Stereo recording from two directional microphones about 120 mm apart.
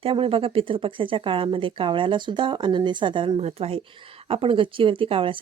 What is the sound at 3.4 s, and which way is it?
Speech, 60° right (ahead or behind).